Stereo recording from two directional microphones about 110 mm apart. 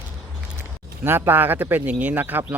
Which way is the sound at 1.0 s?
20° right (ahead or behind).